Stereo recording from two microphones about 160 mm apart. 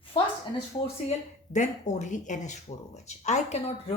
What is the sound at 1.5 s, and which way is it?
Speech, 50° left (ahead or behind).